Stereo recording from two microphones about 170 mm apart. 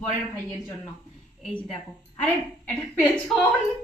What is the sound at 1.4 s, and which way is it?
A woman's voice, 5° left (ahead or behind).